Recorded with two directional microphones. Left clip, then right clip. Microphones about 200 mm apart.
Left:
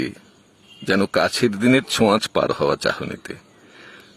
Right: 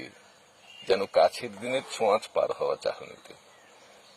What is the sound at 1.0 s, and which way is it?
Speech, 15° left (ahead or behind).